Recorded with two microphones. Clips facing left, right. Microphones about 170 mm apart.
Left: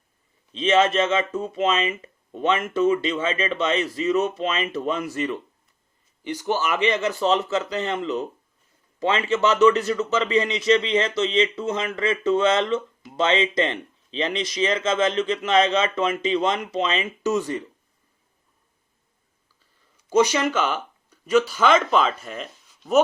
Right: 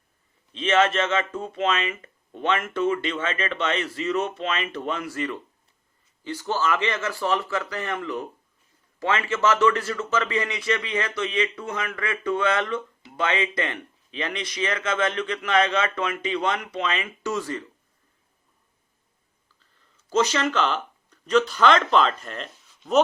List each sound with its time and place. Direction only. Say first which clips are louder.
0.5 s a man's voice: left 2 dB; 25° left (ahead or behind)
19.5 s speech: left 1 dB; 15° left (ahead or behind)